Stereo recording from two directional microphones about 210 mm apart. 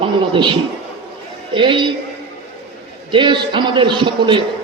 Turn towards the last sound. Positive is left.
turn(degrees=-25)  # may be behind; listen again after turning